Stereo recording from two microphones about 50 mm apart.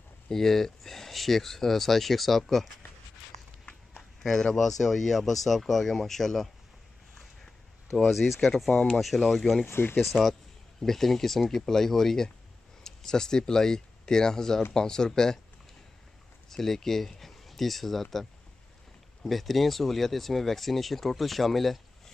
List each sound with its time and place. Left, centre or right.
0.3 s speech: centre
4.2 s speech: centre
7.9 s speech: centre
8.6 s speech: centre
8.9 s speech: centre
9.7 s speech: left
9.9 s speech: centre
16.4 s speech: centre
19.2 s speech: centre